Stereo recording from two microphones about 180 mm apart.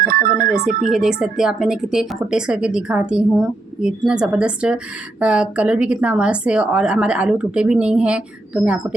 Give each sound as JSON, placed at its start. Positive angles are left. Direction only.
{"t": 0.1, "sound": "speech", "side_deg": -55}
{"t": 0.9, "sound": "a woman's voice", "side_deg": -5}